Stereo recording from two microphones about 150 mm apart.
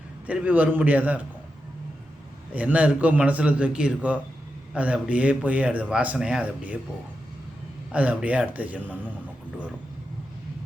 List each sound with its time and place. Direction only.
0.3 s a man's voice: 10° right (ahead or behind)
2.5 s a man's voice: 10° right (ahead or behind)
7.9 s a man's voice: 10° right (ahead or behind)